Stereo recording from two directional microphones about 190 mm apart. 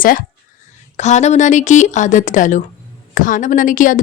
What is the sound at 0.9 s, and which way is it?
A woman's voice, 35° left (ahead or behind).